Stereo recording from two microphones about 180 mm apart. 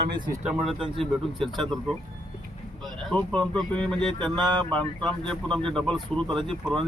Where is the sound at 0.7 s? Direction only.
30° right (ahead or behind).